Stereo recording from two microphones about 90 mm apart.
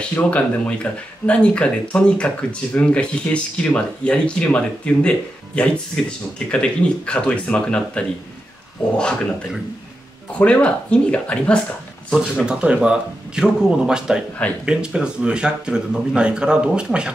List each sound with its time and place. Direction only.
0.0 s speech: 15° left (ahead or behind)
10.4 s speech: 10° left (ahead or behind)
12.1 s speech: 5° right (ahead or behind)